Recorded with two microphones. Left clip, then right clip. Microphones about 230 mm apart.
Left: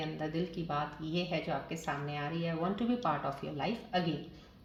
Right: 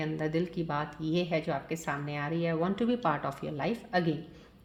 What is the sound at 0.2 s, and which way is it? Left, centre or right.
Speech, right.